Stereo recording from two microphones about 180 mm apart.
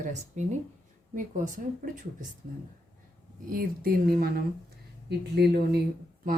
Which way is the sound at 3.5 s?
55° right (ahead or behind).